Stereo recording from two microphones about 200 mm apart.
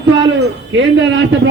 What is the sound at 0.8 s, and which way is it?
Speech, 60° right (ahead or behind).